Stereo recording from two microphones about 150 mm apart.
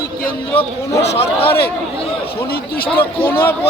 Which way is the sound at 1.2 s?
40° left (ahead or behind).